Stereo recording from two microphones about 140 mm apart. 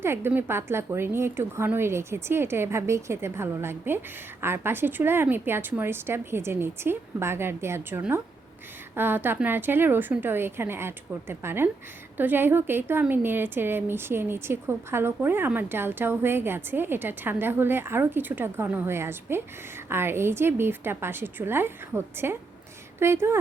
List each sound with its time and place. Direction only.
0.0 s speech: 15° right (ahead or behind)